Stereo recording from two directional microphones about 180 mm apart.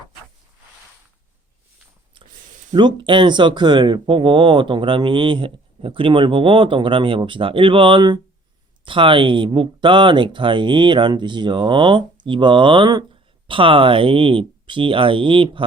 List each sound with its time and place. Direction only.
2.7 s speech: 25° right (ahead or behind)